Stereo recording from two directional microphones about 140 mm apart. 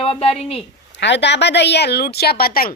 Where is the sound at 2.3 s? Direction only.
90° left.